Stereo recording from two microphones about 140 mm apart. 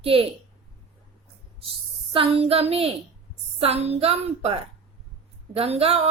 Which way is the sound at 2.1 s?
45° right (ahead or behind).